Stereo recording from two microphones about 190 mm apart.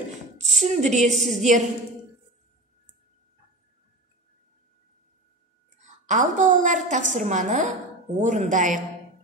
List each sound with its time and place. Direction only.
0.6 s a woman's voice: 40° right (ahead or behind)
5.8 s a woman's voice: 40° right (ahead or behind)